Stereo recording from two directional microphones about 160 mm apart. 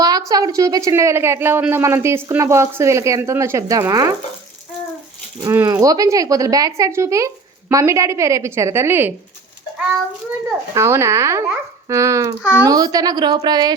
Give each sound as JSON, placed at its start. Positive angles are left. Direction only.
{"t": 0.0, "sound": "a woman's voice", "side_deg": -25}
{"t": 5.4, "sound": "a woman's voice", "side_deg": -20}
{"t": 10.8, "sound": "a woman's voice", "side_deg": -15}